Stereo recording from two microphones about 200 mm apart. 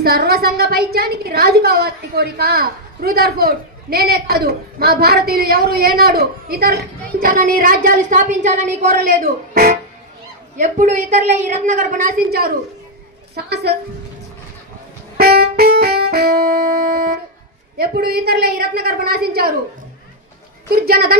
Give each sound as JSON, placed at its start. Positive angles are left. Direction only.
{"t": 0.0, "sound": "a woman's voice", "side_deg": -50}
{"t": 15.1, "sound": "music", "side_deg": -50}
{"t": 17.7, "sound": "a woman's voice", "side_deg": -50}
{"t": 20.7, "sound": "a woman's voice", "side_deg": -50}